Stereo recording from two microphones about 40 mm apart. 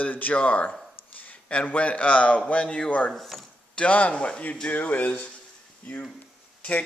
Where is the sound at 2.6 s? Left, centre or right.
Left.